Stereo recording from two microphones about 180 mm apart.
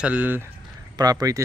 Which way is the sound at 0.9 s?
20° right (ahead or behind).